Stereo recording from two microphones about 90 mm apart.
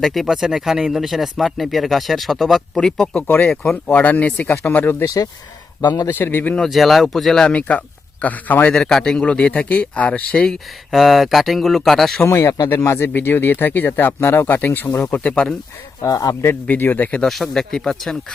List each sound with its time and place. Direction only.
0.0 s speech: centre (ahead or behind)
3.8 s speech: 20° left (ahead or behind)
5.0 s speech: 40° left (ahead or behind)
6.1 s speech: 25° left (ahead or behind)
6.6 s speech: centre (ahead or behind); by 8.7 s 20° left (ahead or behind)
8.7 s speech: 5° left (ahead or behind)
12.2 s speech: 30° left (ahead or behind); by 15.5 s 10° left (ahead or behind)
16.0 s speech: 40° left (ahead or behind)
16.5 s speech: 20° left (ahead or behind)
17.2 s speech: centre (ahead or behind)